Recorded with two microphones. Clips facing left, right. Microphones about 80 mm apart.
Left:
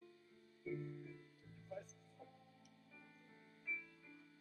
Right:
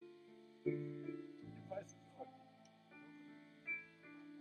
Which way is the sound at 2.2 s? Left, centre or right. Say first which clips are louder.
Right 8 dB; right.